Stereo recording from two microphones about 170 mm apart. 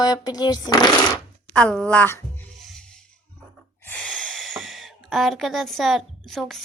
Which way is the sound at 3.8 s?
5° left (ahead or behind).